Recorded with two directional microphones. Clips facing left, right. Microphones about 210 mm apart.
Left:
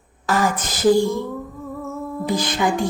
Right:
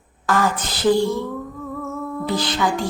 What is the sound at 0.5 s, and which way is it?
Speech, 45° left (ahead or behind).